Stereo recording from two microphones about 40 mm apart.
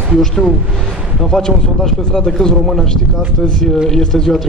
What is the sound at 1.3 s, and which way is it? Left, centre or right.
A man's voice, centre.